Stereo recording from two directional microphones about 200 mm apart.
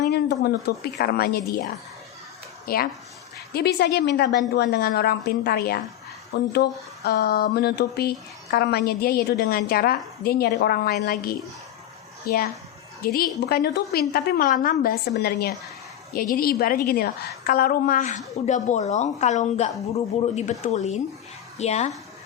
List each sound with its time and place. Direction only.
0.0 s a sound: 55° left (ahead or behind)
0.9 s speech: 50° left (ahead or behind)
2.7 s a woman's voice: 50° left (ahead or behind)